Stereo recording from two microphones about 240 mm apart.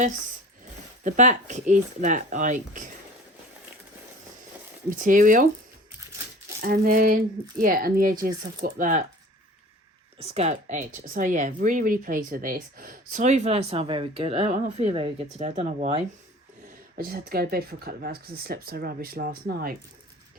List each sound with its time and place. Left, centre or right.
1.0 s speech: right
4.9 s speech: right
6.6 s speech: right
10.2 s speech: right
16.9 s speech: right